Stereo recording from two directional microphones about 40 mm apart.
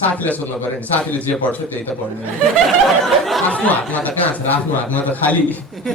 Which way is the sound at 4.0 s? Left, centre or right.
Left.